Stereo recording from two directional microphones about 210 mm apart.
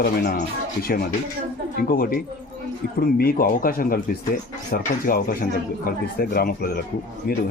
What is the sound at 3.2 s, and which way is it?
Speech, 45° left (ahead or behind).